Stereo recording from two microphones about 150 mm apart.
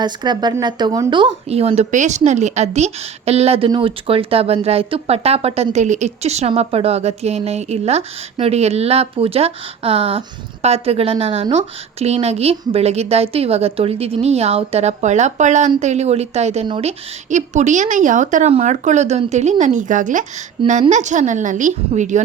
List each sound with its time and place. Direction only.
0.0 s a woman's voice: 30° right (ahead or behind); by 16.6 s 45° right (ahead or behind)
16.6 s speech: 35° right (ahead or behind)
17.2 s a woman's voice: 50° right (ahead or behind)
20.6 s speech: 35° right (ahead or behind)
20.9 s a woman's voice: 55° right (ahead or behind)